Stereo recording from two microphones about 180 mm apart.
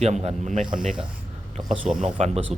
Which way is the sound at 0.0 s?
35° right (ahead or behind).